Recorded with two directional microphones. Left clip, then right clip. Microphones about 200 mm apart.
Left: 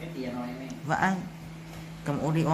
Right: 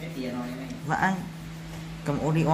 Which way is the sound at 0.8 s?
15° left (ahead or behind).